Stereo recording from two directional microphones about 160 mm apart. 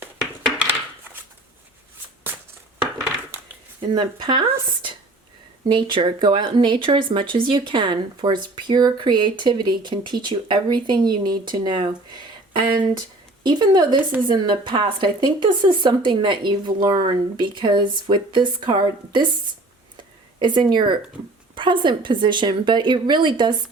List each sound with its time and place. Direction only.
3.8 s speech: 30° right (ahead or behind)
20.0 s a sound: 30° right (ahead or behind)
21.5 s speech: 30° right (ahead or behind)